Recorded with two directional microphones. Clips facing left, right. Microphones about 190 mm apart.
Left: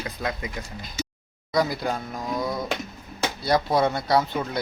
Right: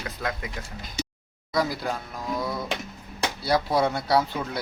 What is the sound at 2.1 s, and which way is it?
Music, 20° left (ahead or behind).